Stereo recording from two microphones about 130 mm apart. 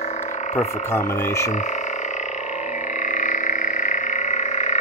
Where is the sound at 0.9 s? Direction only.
20° left (ahead or behind).